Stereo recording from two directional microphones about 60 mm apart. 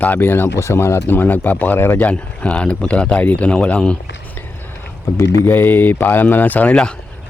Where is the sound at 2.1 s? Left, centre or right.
Left.